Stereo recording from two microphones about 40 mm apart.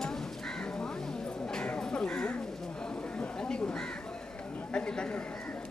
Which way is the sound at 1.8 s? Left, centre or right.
Centre.